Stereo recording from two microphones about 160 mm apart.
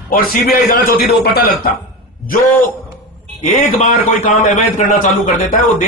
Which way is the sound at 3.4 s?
60° left (ahead or behind).